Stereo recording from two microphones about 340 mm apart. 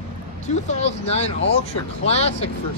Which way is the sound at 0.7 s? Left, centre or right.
Centre.